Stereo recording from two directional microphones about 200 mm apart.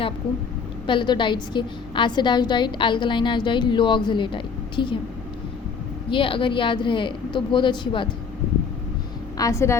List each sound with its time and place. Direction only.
0.9 s a woman's voice: 25° left (ahead or behind)
6.1 s a woman's voice: 25° left (ahead or behind)
9.4 s a woman's voice: 15° left (ahead or behind)